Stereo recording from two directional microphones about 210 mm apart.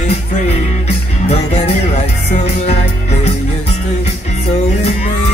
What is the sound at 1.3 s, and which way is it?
Music, 30° left (ahead or behind).